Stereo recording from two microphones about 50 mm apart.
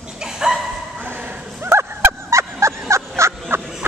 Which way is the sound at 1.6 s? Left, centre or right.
Right.